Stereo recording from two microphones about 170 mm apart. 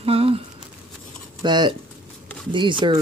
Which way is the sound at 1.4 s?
25° right (ahead or behind).